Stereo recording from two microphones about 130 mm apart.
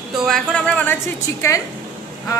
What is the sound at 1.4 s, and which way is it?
Speech, 25° left (ahead or behind).